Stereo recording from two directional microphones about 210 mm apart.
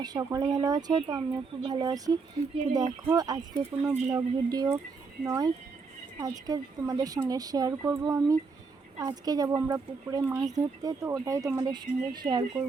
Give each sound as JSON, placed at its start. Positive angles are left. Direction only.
{"t": 0.0, "sound": "speech", "side_deg": -15}